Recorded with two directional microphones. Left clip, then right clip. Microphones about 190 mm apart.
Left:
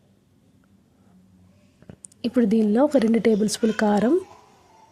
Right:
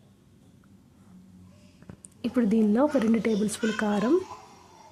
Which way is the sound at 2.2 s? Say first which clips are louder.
Left 4 dB; 15° left (ahead or behind).